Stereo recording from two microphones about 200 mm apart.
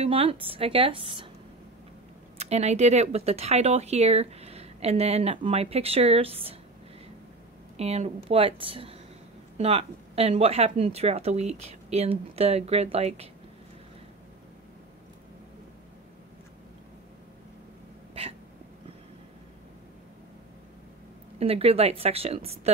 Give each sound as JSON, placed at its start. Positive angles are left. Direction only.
{"t": 0.0, "sound": "a woman's voice", "side_deg": -30}
{"t": 2.3, "sound": "speech", "side_deg": -35}
{"t": 7.7, "sound": "a woman's voice", "side_deg": -30}
{"t": 21.4, "sound": "a woman's voice", "side_deg": -30}